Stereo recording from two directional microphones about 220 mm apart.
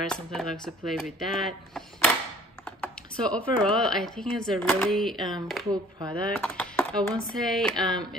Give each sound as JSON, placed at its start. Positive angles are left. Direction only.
{"t": 0.0, "sound": "speech", "side_deg": 5}
{"t": 5.7, "sound": "speech", "side_deg": -15}
{"t": 6.3, "sound": "speech", "side_deg": 5}